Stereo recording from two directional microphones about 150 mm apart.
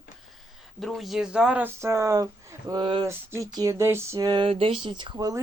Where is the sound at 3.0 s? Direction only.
20° right (ahead or behind).